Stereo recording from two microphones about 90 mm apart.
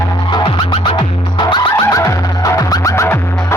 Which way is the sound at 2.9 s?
25° left (ahead or behind).